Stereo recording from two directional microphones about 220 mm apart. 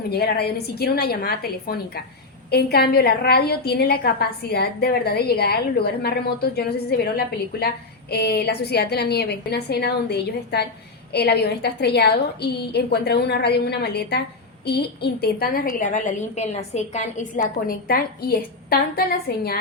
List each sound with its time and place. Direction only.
0.1 s a woman's voice: 45° left (ahead or behind); by 17.4 s 30° left (ahead or behind)
17.7 s a woman's voice: 40° left (ahead or behind)